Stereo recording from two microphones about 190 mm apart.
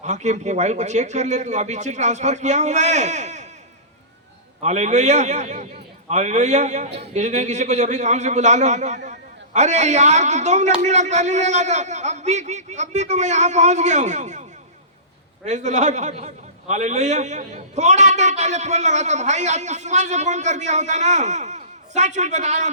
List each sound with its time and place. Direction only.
0.0 s a man's voice: 40° right (ahead or behind)
4.6 s a man's voice: 40° right (ahead or behind)
15.4 s a man's voice: 40° right (ahead or behind)